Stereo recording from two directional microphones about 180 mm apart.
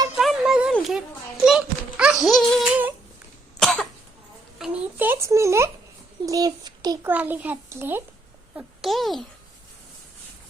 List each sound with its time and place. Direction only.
0.2 s a sound: centre (ahead or behind)
3.6 s cough: 5° left (ahead or behind)
4.5 s a sound: 5° right (ahead or behind)
6.2 s a child's voice: 20° right (ahead or behind)
7.1 s a child's voice: 10° right (ahead or behind)
8.5 s a child's voice: centre (ahead or behind)